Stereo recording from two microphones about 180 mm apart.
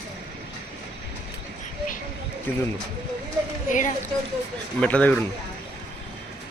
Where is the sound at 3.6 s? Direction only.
45° left (ahead or behind).